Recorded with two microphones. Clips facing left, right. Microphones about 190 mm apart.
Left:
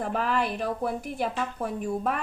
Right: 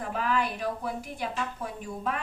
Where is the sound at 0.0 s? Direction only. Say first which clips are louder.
Left 2 dB; 50° left (ahead or behind).